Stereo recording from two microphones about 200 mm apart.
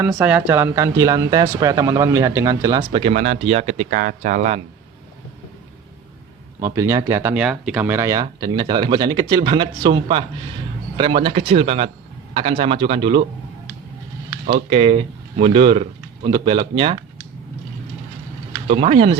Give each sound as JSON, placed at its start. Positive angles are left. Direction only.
{"t": 0.0, "sound": "speech", "side_deg": -10}
{"t": 6.6, "sound": "speech", "side_deg": -15}
{"t": 14.4, "sound": "speech", "side_deg": -35}
{"t": 18.7, "sound": "speech", "side_deg": -30}